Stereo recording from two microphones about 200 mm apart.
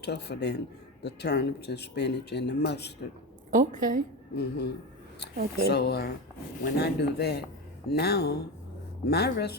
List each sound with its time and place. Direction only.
0.0 s speech: 55° left (ahead or behind)
3.5 s a woman's voice: 40° right (ahead or behind)
4.4 s speech: 55° left (ahead or behind)